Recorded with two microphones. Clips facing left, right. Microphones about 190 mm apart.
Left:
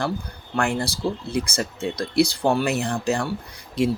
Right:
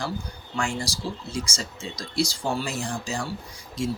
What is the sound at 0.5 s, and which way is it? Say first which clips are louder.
Speech: left 5 dB; 60° left (ahead or behind).